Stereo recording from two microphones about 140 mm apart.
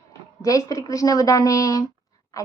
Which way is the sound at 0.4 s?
25° left (ahead or behind).